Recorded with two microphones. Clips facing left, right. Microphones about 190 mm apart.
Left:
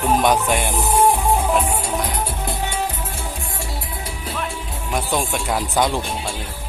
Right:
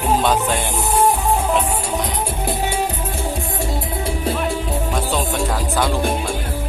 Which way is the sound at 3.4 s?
40° right (ahead or behind).